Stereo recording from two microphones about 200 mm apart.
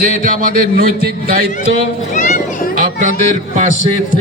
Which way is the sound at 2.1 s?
40° left (ahead or behind).